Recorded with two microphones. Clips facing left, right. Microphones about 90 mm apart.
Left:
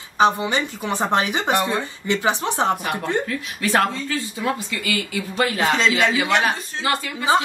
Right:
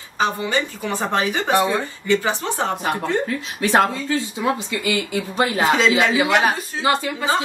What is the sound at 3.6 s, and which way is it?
Speech, 25° right (ahead or behind).